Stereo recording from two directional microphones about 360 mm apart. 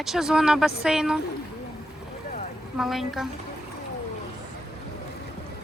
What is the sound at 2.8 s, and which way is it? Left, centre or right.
Speech, centre.